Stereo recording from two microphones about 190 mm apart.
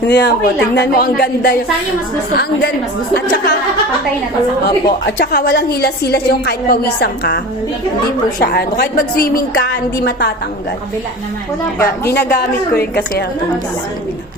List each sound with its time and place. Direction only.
0.0 s a woman's voice: 65° left (ahead or behind)
4.6 s a woman's voice: 60° left (ahead or behind)
8.4 s a woman's voice: 55° left (ahead or behind)
11.8 s a woman's voice: 55° left (ahead or behind)